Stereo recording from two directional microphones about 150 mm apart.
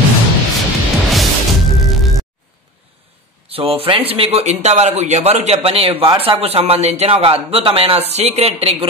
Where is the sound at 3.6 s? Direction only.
40° right (ahead or behind).